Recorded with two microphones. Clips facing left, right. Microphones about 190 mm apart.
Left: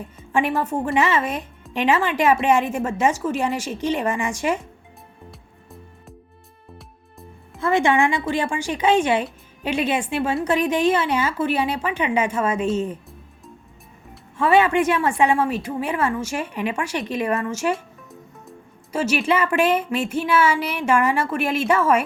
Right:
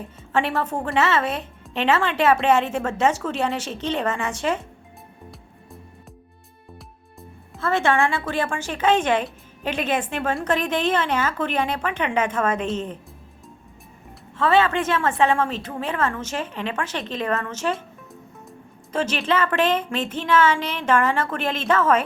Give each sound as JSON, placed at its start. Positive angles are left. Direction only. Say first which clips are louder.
{"t": 0.3, "sound": "a woman's voice", "louder": "left 2 dB", "side_deg": 10}
{"t": 7.6, "sound": "a woman's voice", "louder": "left 2 dB", "side_deg": 15}
{"t": 14.3, "sound": "a woman's voice", "louder": "left 2 dB", "side_deg": 15}
{"t": 18.9, "sound": "a woman's voice", "louder": "left 2 dB", "side_deg": 10}